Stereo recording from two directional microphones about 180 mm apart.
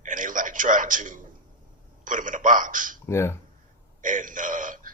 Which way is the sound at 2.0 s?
45° right (ahead or behind).